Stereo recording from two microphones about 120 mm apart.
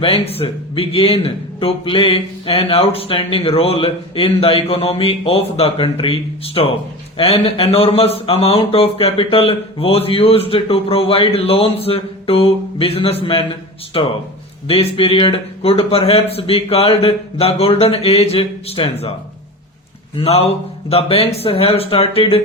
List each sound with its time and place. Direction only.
0.0 s speech: 50° left (ahead or behind)
20.1 s a man's voice: 55° left (ahead or behind)